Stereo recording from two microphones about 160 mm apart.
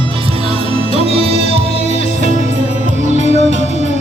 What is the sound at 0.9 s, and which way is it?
Music, 40° left (ahead or behind).